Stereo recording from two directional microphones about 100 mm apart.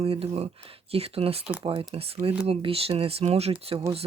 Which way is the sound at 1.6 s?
60° right (ahead or behind).